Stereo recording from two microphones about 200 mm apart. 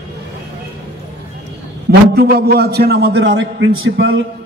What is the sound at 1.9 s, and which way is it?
A man's voice, 50° right (ahead or behind).